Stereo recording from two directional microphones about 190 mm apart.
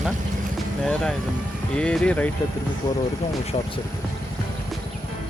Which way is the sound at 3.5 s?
30° left (ahead or behind).